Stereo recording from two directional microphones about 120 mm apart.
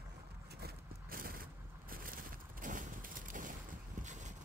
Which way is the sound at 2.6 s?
90° right.